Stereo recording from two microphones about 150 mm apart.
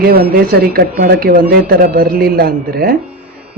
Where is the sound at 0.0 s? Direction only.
90° right.